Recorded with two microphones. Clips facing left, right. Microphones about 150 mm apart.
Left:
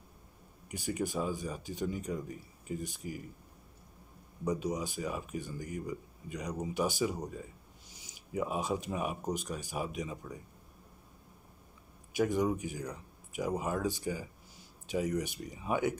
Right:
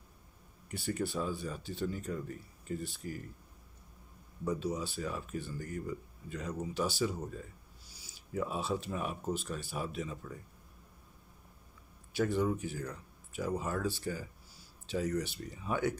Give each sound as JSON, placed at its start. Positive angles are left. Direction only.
{"t": 0.7, "sound": "speech", "side_deg": 15}
{"t": 4.5, "sound": "speech", "side_deg": 15}
{"t": 12.2, "sound": "speech", "side_deg": 15}